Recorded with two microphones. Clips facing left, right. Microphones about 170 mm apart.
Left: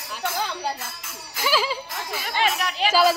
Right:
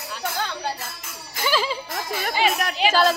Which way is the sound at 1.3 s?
5° left (ahead or behind).